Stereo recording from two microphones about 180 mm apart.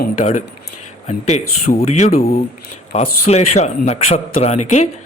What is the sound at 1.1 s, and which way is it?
Speech, 40° left (ahead or behind).